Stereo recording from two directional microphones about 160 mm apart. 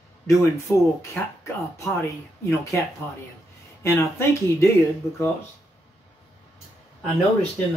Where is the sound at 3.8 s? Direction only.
20° left (ahead or behind).